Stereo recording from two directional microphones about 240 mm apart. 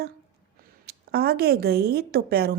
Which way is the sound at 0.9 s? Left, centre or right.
Right.